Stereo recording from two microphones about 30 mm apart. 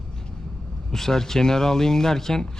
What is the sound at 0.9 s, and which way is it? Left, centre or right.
Speech, centre.